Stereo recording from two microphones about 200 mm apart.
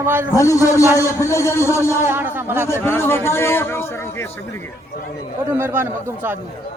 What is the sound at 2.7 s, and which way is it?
A man's voice, 10° left (ahead or behind).